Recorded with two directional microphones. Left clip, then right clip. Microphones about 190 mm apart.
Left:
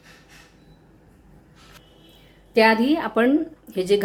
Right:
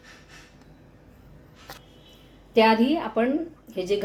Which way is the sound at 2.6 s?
20° left (ahead or behind).